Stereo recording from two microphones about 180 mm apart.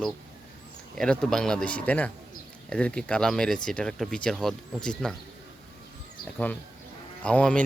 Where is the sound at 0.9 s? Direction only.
5° left (ahead or behind).